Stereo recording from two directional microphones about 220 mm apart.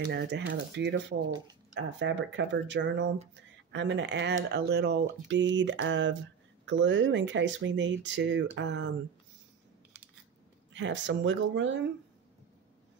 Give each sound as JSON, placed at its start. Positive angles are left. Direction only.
{"t": 0.1, "sound": "speech", "side_deg": -50}
{"t": 10.7, "sound": "speech", "side_deg": -55}